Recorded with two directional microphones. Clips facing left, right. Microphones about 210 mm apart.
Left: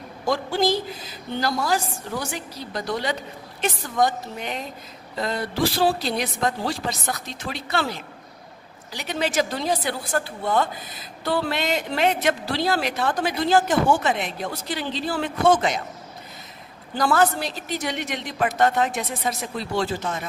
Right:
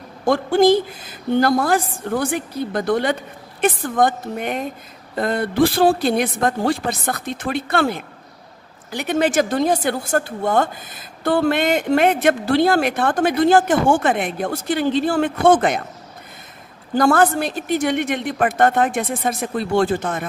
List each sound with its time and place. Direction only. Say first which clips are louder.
0.2 s a woman's voice: right 7 dB; 55° right (ahead or behind)
16.9 s a woman's voice: right 5 dB; 50° right (ahead or behind)